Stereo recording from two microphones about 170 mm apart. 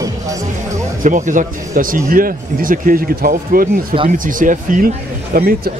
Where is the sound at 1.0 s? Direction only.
50° right (ahead or behind).